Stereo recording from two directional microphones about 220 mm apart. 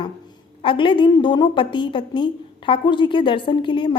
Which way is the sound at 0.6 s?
25° left (ahead or behind).